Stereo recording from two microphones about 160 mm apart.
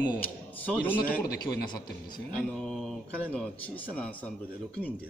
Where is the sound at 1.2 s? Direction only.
25° left (ahead or behind).